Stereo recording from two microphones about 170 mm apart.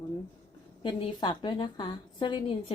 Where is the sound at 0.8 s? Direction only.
30° left (ahead or behind).